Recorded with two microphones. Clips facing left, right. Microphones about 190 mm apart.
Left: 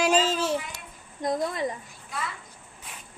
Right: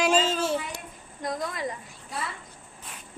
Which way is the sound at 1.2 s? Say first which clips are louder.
Left 4 dB; 25° left (ahead or behind).